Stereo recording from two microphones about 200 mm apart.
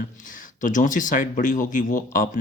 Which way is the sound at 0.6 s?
40° left (ahead or behind).